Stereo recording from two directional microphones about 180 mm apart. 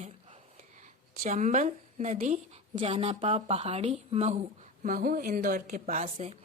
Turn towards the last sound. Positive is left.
turn(degrees=-40)  # may be behind; listen again after turning